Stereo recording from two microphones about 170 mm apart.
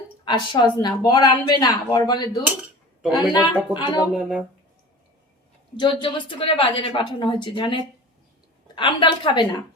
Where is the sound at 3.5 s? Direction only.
30° left (ahead or behind).